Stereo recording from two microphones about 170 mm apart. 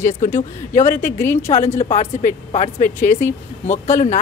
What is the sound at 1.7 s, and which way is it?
Speech, 40° left (ahead or behind).